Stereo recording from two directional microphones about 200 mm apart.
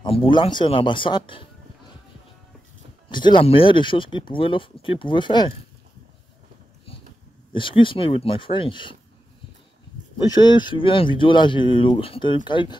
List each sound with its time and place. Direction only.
0.0 s speech: 25° left (ahead or behind)
3.1 s speech: 25° left (ahead or behind)
7.5 s speech: 25° left (ahead or behind)
10.1 s speech: 20° left (ahead or behind)